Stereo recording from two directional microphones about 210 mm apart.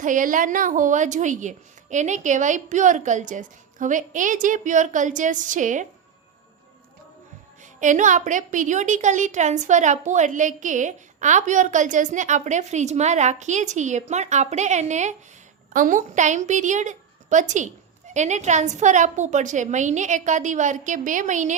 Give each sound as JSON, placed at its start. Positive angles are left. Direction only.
{"t": 0.0, "sound": "a woman's voice", "side_deg": -40}
{"t": 7.6, "sound": "a woman's voice", "side_deg": -35}